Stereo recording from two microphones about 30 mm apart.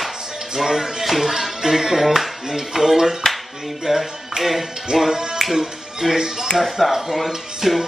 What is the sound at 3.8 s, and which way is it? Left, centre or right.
Music, centre.